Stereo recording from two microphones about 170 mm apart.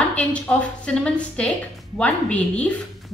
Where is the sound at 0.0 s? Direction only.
5° left (ahead or behind).